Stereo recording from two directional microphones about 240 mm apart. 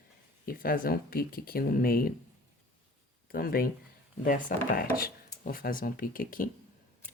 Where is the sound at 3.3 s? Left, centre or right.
Left.